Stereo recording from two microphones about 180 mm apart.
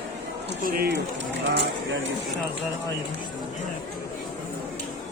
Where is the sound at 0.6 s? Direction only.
60° right (ahead or behind).